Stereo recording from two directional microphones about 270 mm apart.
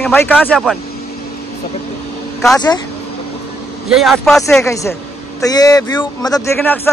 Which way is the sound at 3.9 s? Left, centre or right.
Centre.